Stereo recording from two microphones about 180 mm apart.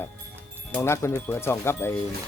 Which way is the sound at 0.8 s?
15° left (ahead or behind).